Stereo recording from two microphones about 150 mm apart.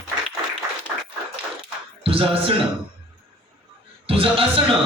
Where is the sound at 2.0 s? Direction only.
35° right (ahead or behind).